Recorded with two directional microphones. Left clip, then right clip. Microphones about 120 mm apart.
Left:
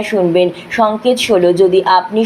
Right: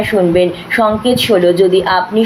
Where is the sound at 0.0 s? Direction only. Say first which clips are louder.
Right 1 dB; 30° left (ahead or behind).